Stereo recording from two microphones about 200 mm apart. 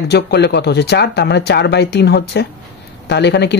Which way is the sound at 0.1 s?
55° left (ahead or behind).